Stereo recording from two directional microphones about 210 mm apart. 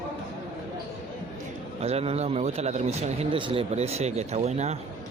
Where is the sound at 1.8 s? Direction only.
30° right (ahead or behind).